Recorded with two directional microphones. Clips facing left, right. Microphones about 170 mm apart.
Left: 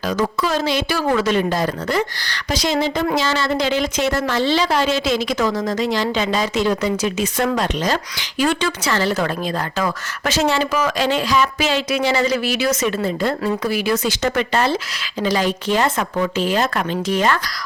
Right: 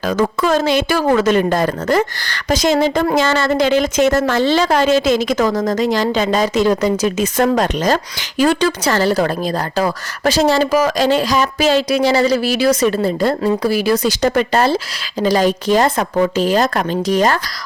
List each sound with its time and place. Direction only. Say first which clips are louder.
0.0 s a woman's voice: right 4 dB; 50° right (ahead or behind)